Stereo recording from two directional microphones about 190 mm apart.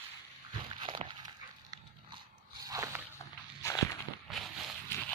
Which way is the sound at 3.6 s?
15° left (ahead or behind).